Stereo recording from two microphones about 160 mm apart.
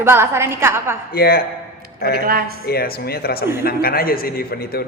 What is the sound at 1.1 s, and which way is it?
Speech, 70° left (ahead or behind).